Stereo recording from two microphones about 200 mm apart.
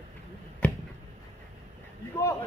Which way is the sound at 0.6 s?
5° left (ahead or behind).